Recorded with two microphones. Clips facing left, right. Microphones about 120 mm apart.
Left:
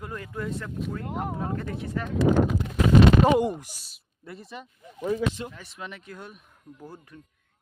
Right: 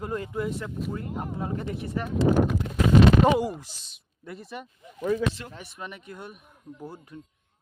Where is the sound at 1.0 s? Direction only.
90° left.